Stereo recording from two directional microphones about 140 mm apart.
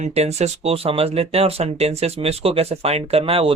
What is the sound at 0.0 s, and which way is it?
Speech, 50° right (ahead or behind).